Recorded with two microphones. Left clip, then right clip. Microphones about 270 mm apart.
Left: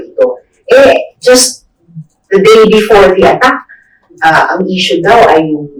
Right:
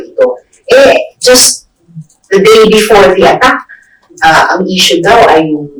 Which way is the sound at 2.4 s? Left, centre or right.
Left.